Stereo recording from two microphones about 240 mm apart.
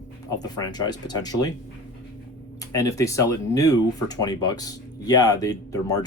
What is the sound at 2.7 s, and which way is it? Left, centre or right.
Speech, centre.